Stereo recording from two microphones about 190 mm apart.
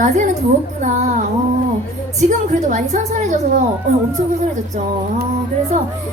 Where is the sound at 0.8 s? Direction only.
40° right (ahead or behind).